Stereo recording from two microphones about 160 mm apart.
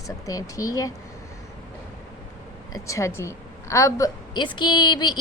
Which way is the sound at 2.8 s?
20° left (ahead or behind).